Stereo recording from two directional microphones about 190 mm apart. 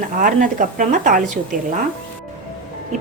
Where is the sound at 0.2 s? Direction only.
45° right (ahead or behind).